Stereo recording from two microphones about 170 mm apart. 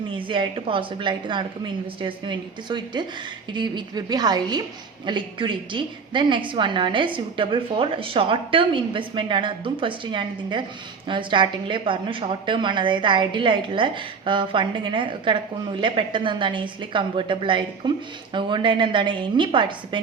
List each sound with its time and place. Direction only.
0.1 s a woman's voice: 30° right (ahead or behind)